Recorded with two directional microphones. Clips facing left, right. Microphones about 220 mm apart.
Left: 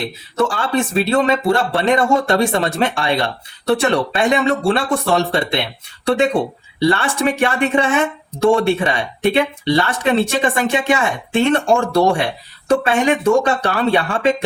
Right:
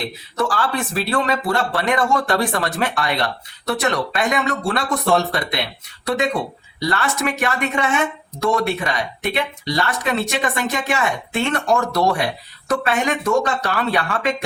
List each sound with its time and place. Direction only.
0.3 s speech: 25° left (ahead or behind)